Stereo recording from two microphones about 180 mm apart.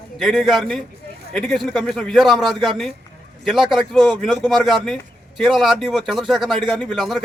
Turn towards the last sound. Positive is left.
turn(degrees=0)  # may be behind; listen again after turning